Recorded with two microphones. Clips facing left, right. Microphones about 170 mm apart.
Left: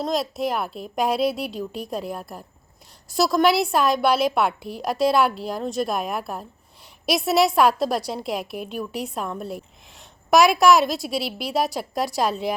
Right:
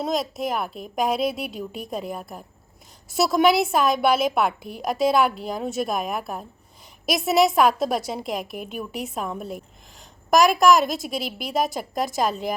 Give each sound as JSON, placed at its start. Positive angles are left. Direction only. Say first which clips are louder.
{"t": 0.0, "sound": "a woman's voice", "louder": "left 1 dB", "side_deg": 0}
{"t": 11.2, "sound": "a woman's voice", "louder": "left 2 dB", "side_deg": -45}
{"t": 11.4, "sound": "a woman's voice", "louder": "right 1 dB", "side_deg": 0}